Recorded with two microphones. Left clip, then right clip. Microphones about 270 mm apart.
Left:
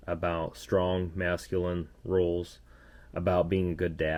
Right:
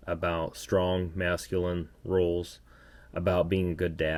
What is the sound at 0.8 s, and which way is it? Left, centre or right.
Speech, right.